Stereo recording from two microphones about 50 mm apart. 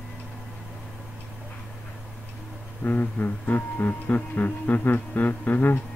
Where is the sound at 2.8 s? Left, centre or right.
Left.